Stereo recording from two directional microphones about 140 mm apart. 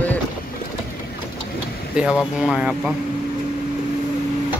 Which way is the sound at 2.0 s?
5° right (ahead or behind).